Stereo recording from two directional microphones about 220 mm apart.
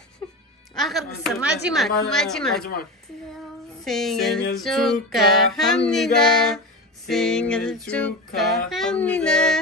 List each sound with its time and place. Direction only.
0.7 s speech: centre (ahead or behind)
2.6 s a woman's voice: 45° left (ahead or behind)
3.8 s speech: centre (ahead or behind)